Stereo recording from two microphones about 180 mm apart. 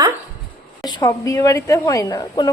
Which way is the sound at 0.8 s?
20° left (ahead or behind).